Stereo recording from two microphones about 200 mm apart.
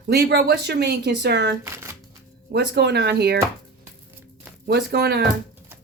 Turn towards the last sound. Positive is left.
turn(degrees=-55)  # may be behind; listen again after turning